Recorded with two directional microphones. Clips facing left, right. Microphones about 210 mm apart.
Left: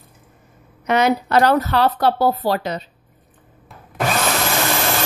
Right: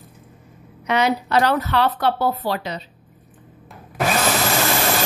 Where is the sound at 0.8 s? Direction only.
45° left (ahead or behind).